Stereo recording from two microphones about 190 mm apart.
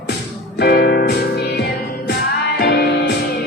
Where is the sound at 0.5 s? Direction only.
55° left (ahead or behind).